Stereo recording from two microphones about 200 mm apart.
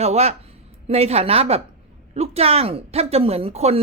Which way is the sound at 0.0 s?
30° right (ahead or behind).